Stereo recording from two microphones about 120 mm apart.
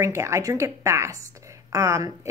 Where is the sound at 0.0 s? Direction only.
25° right (ahead or behind).